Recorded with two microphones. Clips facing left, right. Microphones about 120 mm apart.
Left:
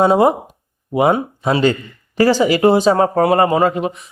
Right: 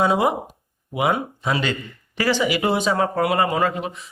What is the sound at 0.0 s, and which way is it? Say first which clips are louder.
Speech: left 7 dB; 40° left (ahead or behind).